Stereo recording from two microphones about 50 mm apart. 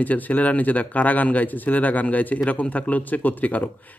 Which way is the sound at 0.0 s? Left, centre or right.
Left.